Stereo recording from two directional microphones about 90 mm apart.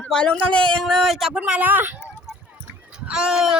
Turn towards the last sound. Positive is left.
turn(degrees=-5)  # may be behind; listen again after turning